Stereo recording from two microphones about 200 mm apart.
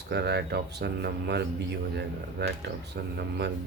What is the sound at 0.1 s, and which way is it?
Speech, 60° right (ahead or behind).